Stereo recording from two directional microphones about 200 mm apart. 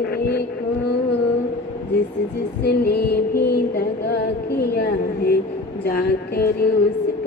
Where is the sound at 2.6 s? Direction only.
50° left (ahead or behind).